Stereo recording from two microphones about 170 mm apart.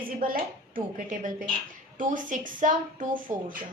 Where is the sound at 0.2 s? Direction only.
55° right (ahead or behind).